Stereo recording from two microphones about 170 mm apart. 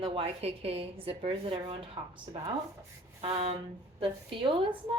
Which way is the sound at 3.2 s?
35° right (ahead or behind).